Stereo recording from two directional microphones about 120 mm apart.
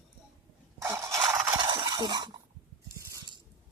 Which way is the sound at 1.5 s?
40° right (ahead or behind).